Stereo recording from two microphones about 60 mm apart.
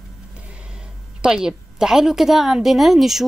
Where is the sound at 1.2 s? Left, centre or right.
Centre.